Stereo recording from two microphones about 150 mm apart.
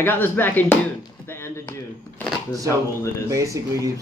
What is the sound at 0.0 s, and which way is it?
Speech, 15° left (ahead or behind).